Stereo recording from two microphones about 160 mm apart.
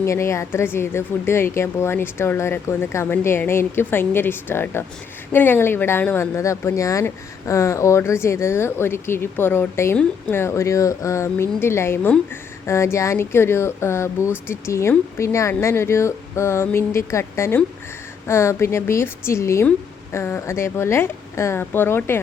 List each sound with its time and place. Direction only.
0.0 s speech: 15° left (ahead or behind)